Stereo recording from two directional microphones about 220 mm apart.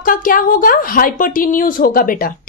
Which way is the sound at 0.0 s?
40° left (ahead or behind).